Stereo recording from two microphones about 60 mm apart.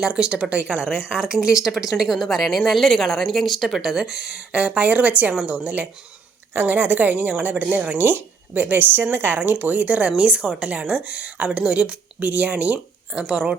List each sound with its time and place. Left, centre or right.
0.0 s speech: centre